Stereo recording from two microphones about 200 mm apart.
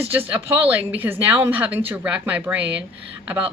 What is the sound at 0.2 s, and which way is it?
A woman's voice, 10° right (ahead or behind).